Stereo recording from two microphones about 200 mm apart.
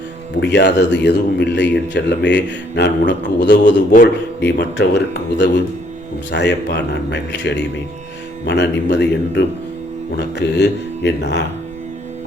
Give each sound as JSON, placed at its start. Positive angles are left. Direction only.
{"t": 0.3, "sound": "a man's voice", "side_deg": 60}